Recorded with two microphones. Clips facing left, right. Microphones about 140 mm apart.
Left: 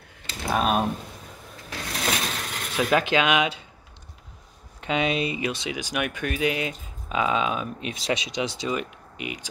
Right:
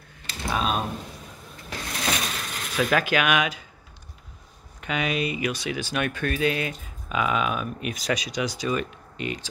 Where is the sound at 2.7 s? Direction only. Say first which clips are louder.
Left 1 dB; 20° left (ahead or behind).